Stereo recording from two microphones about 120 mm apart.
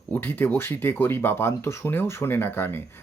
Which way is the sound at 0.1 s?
15° left (ahead or behind).